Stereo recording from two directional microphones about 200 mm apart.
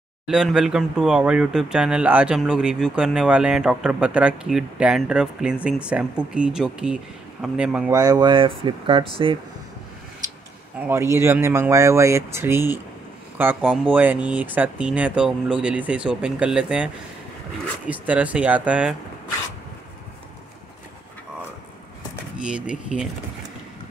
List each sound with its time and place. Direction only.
0.3 s speech: 5° right (ahead or behind)
7.9 s speech: 15° right (ahead or behind)
10.9 s speech: 15° right (ahead or behind)
22.4 s speech: 5° right (ahead or behind)